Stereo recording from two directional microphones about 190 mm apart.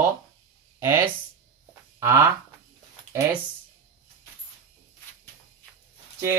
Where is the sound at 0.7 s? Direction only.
15° right (ahead or behind).